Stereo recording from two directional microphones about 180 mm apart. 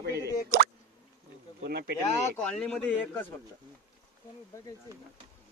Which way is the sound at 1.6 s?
60° right (ahead or behind).